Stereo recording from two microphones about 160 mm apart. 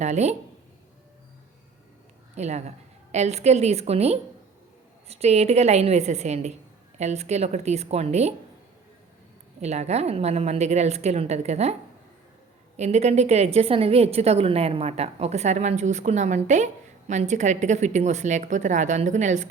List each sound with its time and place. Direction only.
0.0 s a woman's voice: 45° right (ahead or behind)
2.3 s a woman's voice: 45° right (ahead or behind)
9.6 s a woman's voice: 45° right (ahead or behind)